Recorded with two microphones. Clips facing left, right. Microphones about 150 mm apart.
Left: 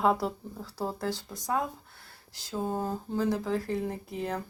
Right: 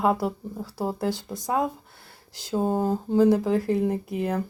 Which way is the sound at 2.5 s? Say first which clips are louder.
Right 7 dB; 35° right (ahead or behind).